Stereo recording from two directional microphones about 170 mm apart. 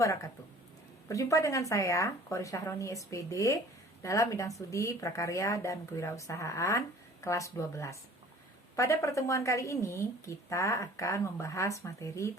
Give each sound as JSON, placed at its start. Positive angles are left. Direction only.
{"t": 0.0, "sound": "a woman's voice", "side_deg": 20}